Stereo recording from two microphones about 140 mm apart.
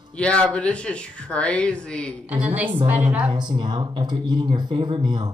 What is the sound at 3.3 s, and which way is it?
Speech, 30° right (ahead or behind).